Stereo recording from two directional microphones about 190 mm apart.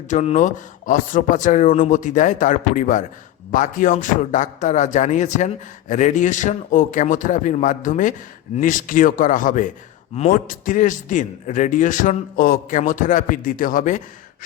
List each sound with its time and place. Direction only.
0.1 s a man's voice: 40° left (ahead or behind)